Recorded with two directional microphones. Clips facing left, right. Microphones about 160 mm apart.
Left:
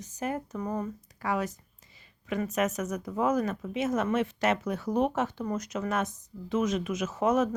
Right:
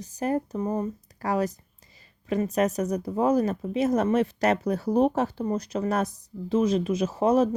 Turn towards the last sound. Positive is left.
turn(degrees=-30)  # may be behind; listen again after turning